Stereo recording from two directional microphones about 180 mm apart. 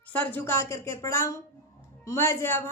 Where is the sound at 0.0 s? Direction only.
10° left (ahead or behind).